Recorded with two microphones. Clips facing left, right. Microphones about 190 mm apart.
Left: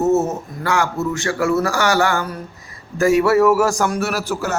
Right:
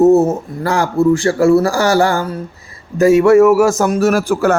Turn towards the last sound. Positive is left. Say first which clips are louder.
# right 9 dB
turn(degrees=-50)  # may be behind; listen again after turning